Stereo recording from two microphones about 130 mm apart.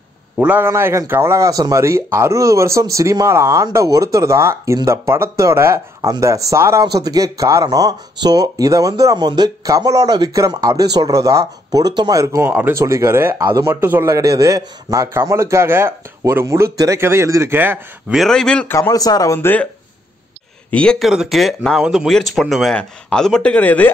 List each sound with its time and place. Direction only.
0.4 s speech: 15° right (ahead or behind)
18.1 s speech: 5° left (ahead or behind)
18.7 s speech: 25° left (ahead or behind)
20.7 s speech: 5° left (ahead or behind)